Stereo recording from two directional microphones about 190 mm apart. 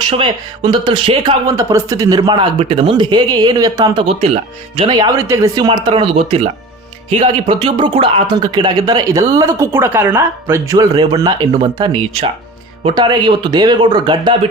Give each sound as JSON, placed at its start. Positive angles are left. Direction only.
{"t": 0.0, "sound": "speech", "side_deg": -25}
{"t": 1.5, "sound": "speech", "side_deg": -15}
{"t": 4.0, "sound": "speech", "side_deg": -30}